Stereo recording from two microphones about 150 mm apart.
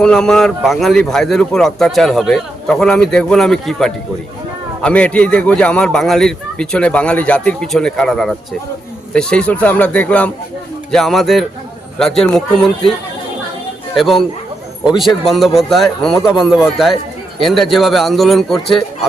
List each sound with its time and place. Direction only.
0.0 s a man's voice: 5° left (ahead or behind)
13.9 s a man's voice: centre (ahead or behind)